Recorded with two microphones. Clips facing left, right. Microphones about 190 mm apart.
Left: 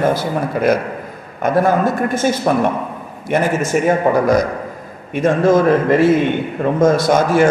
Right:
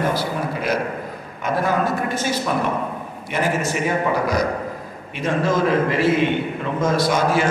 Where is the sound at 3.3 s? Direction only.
50° left (ahead or behind).